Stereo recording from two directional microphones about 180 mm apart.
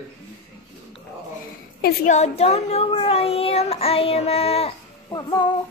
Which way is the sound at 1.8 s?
55° left (ahead or behind).